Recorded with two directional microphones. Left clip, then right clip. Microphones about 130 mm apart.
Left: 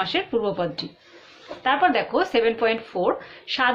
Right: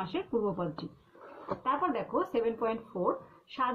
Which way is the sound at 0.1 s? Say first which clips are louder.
Left 11 dB; 5° right (ahead or behind).